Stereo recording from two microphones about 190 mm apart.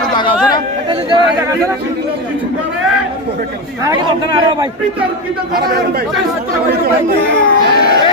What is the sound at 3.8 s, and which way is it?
Speech, 20° right (ahead or behind).